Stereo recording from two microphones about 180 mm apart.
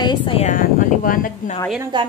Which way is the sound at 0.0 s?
25° left (ahead or behind).